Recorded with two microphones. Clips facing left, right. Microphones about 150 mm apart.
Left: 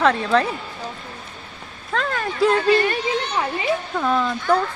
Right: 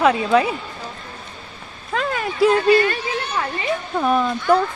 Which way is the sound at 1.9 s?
5° right (ahead or behind).